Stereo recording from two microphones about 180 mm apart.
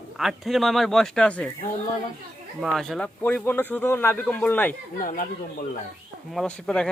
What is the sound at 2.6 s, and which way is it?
Speech, centre (ahead or behind).